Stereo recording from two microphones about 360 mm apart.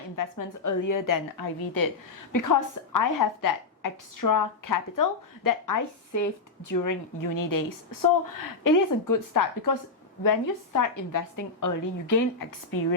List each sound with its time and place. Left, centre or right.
0.2 s a woman's voice: left
2.3 s a woman's voice: left